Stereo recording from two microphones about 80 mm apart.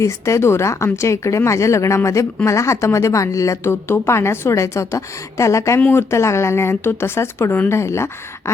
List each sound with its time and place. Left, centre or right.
0.0 s speech: left